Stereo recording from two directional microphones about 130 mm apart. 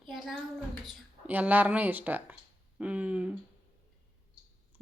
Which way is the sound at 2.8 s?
10° right (ahead or behind).